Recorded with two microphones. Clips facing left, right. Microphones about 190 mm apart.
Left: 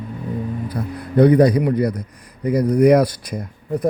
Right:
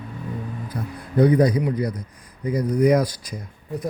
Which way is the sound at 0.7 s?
70° left (ahead or behind).